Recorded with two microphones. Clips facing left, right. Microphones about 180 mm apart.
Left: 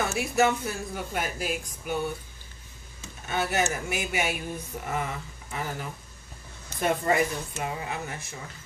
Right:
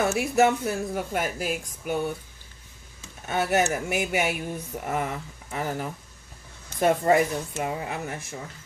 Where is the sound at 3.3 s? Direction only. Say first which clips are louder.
Right 4 dB; 50° right (ahead or behind).